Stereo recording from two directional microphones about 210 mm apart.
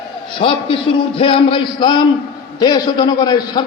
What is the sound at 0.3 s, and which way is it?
A man's voice, 25° left (ahead or behind).